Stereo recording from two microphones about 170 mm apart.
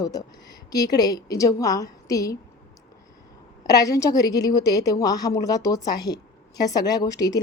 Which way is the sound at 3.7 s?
20° left (ahead or behind).